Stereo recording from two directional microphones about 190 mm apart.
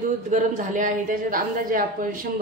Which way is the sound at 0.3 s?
40° right (ahead or behind).